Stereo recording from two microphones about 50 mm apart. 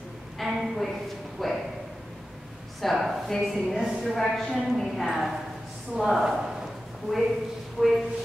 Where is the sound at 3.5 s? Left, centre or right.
Centre.